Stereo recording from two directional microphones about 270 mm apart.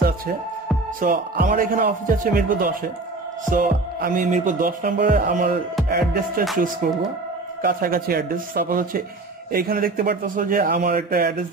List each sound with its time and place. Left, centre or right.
1.0 s music: right